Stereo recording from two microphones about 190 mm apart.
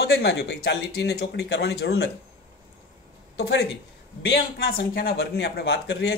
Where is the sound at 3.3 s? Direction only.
65° left (ahead or behind).